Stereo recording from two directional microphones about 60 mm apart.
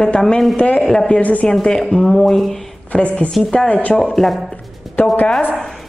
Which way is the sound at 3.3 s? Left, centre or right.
Centre.